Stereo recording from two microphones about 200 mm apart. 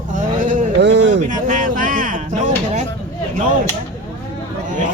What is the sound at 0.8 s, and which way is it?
Speech, 60° right (ahead or behind).